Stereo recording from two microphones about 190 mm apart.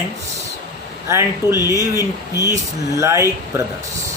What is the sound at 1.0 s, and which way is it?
Speech, 15° right (ahead or behind).